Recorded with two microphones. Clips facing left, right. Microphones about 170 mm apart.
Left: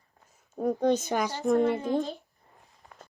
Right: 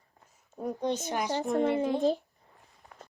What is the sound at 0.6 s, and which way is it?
Speech, 50° left (ahead or behind).